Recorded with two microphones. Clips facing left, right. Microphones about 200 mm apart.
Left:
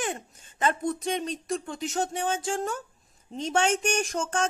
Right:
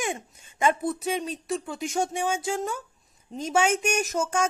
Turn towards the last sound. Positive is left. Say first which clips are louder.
# right 2 dB
turn(degrees=-10)  # may be behind; listen again after turning